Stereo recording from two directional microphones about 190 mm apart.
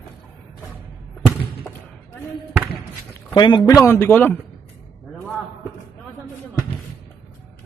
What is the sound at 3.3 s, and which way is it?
Speech, 20° left (ahead or behind).